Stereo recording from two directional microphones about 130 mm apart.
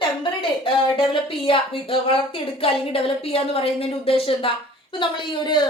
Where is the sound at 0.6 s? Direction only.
40° left (ahead or behind).